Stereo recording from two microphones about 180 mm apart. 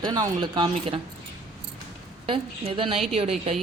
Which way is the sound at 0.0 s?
25° right (ahead or behind).